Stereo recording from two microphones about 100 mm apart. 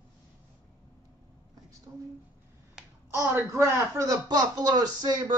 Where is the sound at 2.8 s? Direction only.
5° right (ahead or behind).